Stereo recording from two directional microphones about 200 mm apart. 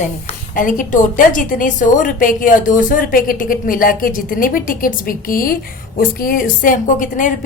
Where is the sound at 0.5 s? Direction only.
40° left (ahead or behind).